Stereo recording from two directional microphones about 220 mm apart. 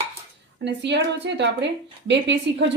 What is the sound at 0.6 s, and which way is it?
A woman's voice, 50° right (ahead or behind).